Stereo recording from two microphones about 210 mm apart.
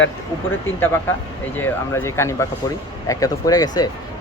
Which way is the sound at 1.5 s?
10° left (ahead or behind).